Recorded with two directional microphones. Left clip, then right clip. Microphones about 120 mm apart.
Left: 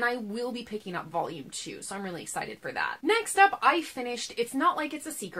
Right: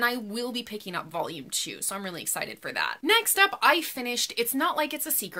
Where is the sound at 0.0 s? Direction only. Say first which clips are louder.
Right 2 dB; 20° right (ahead or behind).